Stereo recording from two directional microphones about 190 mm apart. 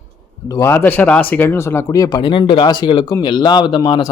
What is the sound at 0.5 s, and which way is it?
Speech, 15° left (ahead or behind).